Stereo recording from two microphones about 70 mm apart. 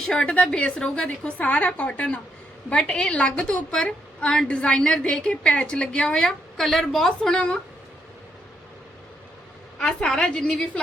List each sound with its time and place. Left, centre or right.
0.0 s a woman's voice: centre
9.7 s a woman's voice: centre